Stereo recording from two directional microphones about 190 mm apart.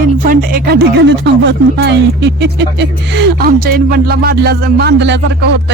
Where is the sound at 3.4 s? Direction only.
50° right (ahead or behind).